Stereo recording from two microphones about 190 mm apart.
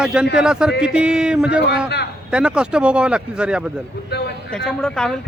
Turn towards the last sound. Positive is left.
turn(degrees=5)  # may be behind; listen again after turning